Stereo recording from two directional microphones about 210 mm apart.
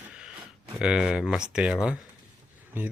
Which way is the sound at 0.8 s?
5° right (ahead or behind).